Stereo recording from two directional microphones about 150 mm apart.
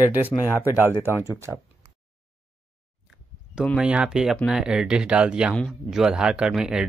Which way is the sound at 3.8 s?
5° right (ahead or behind).